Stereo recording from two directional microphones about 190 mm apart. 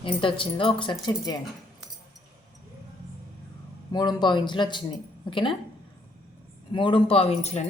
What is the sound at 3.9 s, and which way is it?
Speech, 20° left (ahead or behind).